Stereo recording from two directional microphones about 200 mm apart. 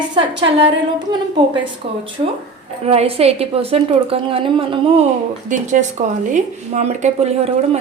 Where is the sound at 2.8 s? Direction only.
30° right (ahead or behind).